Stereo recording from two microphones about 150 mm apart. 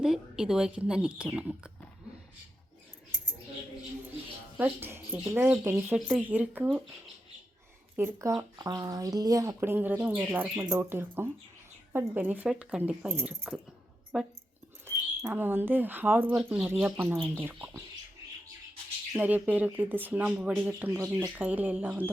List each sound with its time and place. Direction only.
0.0 s speech: 5° right (ahead or behind)
4.6 s speech: 15° right (ahead or behind)
7.9 s speech: 20° right (ahead or behind)
19.1 s speech: 10° right (ahead or behind)